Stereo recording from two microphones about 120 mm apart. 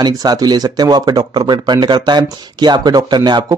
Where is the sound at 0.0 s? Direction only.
35° right (ahead or behind).